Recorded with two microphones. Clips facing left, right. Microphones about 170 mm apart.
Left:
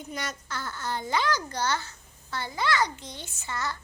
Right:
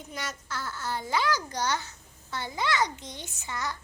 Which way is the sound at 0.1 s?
5° right (ahead or behind).